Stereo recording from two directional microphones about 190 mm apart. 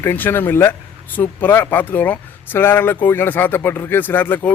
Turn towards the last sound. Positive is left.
turn(degrees=10)  # may be behind; listen again after turning